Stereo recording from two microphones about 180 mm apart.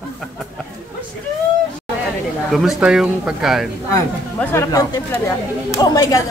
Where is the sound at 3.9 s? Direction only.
15° left (ahead or behind).